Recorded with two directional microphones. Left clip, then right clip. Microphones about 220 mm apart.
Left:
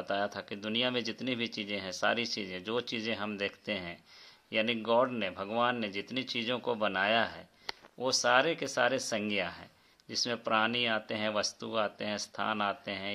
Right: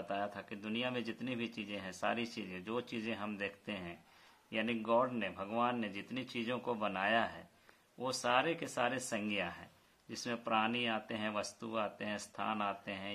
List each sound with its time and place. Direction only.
0.1 s speech: 35° left (ahead or behind)